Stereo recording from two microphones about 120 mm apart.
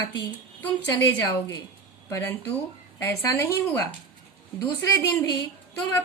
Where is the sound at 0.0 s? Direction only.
30° left (ahead or behind).